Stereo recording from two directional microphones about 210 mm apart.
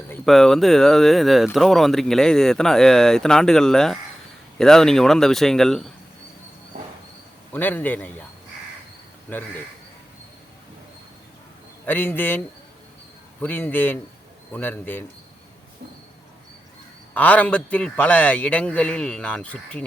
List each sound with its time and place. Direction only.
0.1 s speech: centre (ahead or behind)
6.7 s train: 35° right (ahead or behind)
7.5 s a man's voice: 10° left (ahead or behind)
9.3 s a man's voice: 10° left (ahead or behind)
11.9 s a man's voice: 10° left (ahead or behind)
13.4 s a man's voice: 10° left (ahead or behind)
17.2 s a man's voice: 5° left (ahead or behind)